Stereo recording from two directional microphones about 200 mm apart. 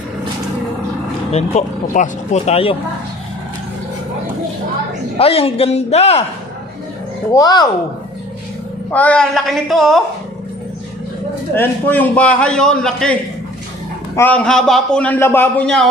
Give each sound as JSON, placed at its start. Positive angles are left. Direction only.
{"t": 1.3, "sound": "speech", "side_deg": 35}
{"t": 5.1, "sound": "a man's voice", "side_deg": 30}
{"t": 7.3, "sound": "a man's voice", "side_deg": 20}
{"t": 8.9, "sound": "a woman's voice", "side_deg": 5}
{"t": 11.5, "sound": "a man's voice", "side_deg": 10}